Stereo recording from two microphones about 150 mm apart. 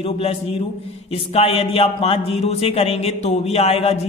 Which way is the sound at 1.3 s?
40° left (ahead or behind).